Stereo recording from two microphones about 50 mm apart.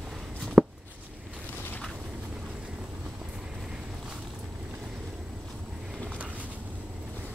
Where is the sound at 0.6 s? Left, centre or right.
Right.